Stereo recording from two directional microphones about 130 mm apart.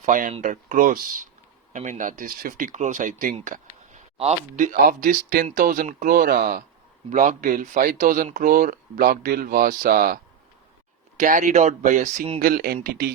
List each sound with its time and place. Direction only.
0.0 s speech: 80° right
0.4 s speech: 90° right
1.7 s speech: 70° right (ahead or behind); by 3.3 s 85° right
3.4 s a sound: 80° right
4.2 s speech: 65° right (ahead or behind); by 6.6 s 90° right
7.1 s speech: 80° right
11.2 s speech: 80° right
12.4 s speech: 90° right